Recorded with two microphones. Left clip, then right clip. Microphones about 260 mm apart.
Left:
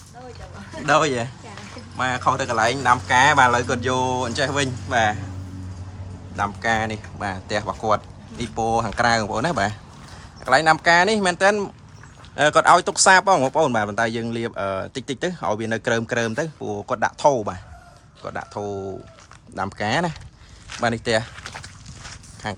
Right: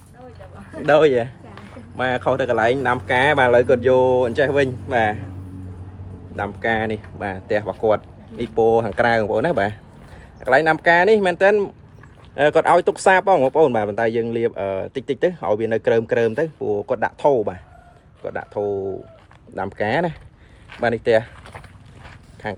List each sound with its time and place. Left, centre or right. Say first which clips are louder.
0.9 s speech: right 4 dB; centre
6.3 s speech: even; centre
21.3 s a sound: left 4 dB; right